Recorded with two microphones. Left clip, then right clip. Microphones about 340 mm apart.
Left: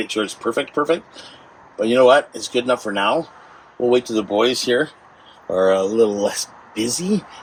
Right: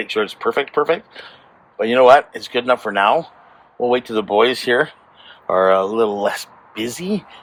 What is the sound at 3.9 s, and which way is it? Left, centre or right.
Speech, centre.